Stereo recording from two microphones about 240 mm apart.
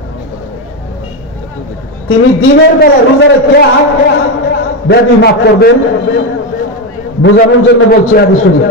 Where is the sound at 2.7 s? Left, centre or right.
Left.